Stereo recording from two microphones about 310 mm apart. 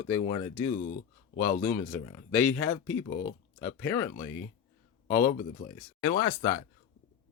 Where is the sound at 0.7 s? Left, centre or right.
Left.